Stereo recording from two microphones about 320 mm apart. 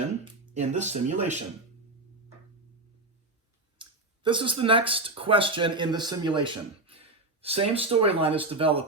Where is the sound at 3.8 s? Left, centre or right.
Centre.